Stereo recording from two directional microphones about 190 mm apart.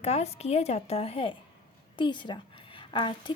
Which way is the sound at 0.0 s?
35° left (ahead or behind).